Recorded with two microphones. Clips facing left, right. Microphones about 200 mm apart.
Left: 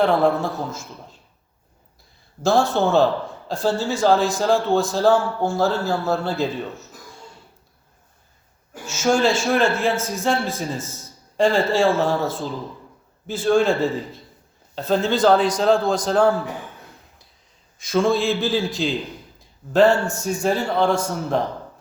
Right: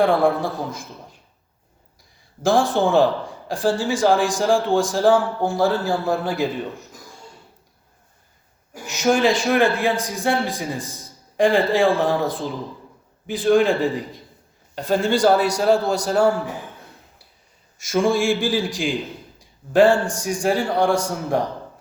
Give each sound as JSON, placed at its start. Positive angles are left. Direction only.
{"t": 0.0, "sound": "a man's voice", "side_deg": -10}
{"t": 2.4, "sound": "a man's voice", "side_deg": -15}
{"t": 8.7, "sound": "a man's voice", "side_deg": -15}
{"t": 17.9, "sound": "a man's voice", "side_deg": -15}
{"t": 19.4, "sound": "a sound", "side_deg": -10}
{"t": 20.4, "sound": "a man's voice", "side_deg": -10}